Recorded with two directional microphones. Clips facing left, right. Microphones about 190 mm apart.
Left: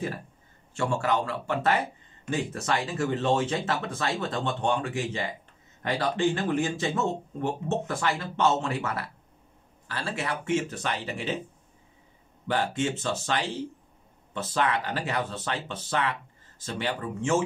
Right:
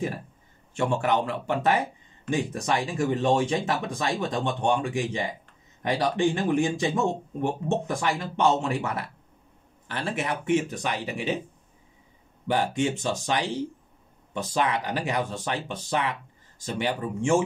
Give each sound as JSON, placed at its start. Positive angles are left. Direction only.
{"t": 0.7, "sound": "speech", "side_deg": -20}
{"t": 12.4, "sound": "speech", "side_deg": -15}